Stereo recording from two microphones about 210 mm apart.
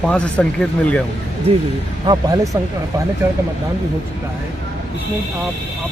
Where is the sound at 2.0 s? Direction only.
20° right (ahead or behind).